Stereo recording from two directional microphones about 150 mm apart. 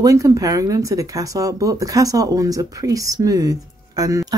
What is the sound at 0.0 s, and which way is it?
Speech, 20° right (ahead or behind).